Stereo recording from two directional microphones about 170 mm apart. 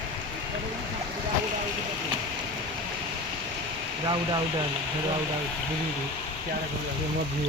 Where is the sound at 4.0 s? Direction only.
25° right (ahead or behind).